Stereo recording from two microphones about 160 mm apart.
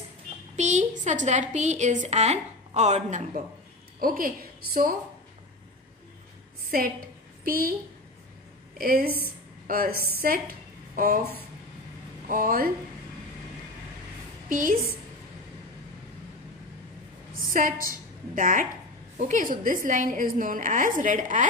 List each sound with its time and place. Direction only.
0.6 s a woman's voice: 50° right (ahead or behind)
4.0 s a woman's voice: 65° right (ahead or behind)
7.4 s a woman's voice: 65° right (ahead or behind)
8.7 s a woman's voice: 65° right (ahead or behind)
12.3 s a woman's voice: 60° right (ahead or behind)
14.5 s a woman's voice: 60° right (ahead or behind)
17.3 s a woman's voice: 60° right (ahead or behind)